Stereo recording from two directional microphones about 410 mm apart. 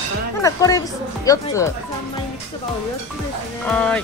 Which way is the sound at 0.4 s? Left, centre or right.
Centre.